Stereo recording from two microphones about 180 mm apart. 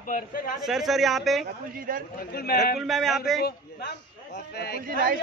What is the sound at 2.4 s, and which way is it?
Speech, 55° left (ahead or behind).